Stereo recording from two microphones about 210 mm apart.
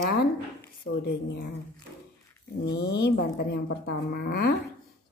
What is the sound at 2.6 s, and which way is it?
A woman's voice, 55° left (ahead or behind).